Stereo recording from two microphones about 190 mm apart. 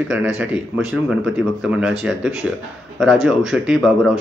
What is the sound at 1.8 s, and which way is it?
Speech, 5° right (ahead or behind).